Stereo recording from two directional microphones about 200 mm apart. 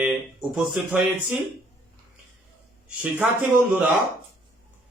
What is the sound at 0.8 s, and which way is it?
Speech, 5° right (ahead or behind).